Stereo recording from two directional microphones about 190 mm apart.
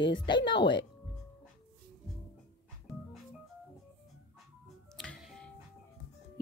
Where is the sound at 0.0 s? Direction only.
25° left (ahead or behind).